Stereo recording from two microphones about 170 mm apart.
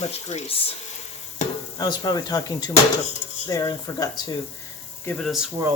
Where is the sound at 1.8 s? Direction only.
25° left (ahead or behind).